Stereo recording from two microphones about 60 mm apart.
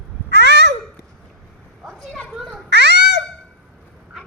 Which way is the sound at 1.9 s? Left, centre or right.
Centre.